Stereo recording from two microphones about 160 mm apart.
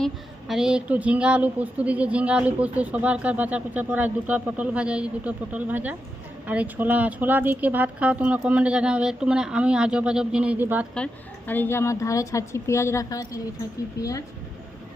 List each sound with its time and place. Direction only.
0.0 s a woman's voice: centre (ahead or behind)
10.9 s a woman's voice: 10° left (ahead or behind)